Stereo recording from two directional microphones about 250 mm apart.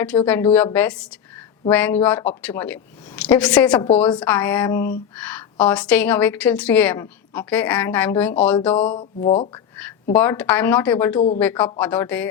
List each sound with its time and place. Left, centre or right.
0.1 s a woman's voice: centre
0.5 s a woman's voice: centre
8.7 s speech: left
9.7 s a woman's voice: centre